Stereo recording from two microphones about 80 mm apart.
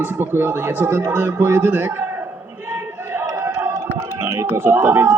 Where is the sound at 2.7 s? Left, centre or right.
Right.